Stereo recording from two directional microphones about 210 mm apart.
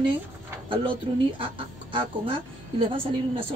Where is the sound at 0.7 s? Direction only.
25° right (ahead or behind).